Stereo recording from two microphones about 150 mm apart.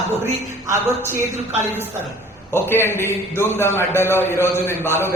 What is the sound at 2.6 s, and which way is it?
A man's voice, 15° left (ahead or behind).